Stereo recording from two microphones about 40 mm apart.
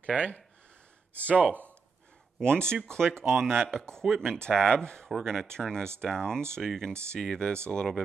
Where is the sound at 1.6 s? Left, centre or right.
Right.